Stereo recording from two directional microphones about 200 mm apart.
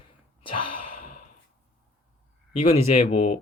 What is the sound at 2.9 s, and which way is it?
Speech, 35° left (ahead or behind).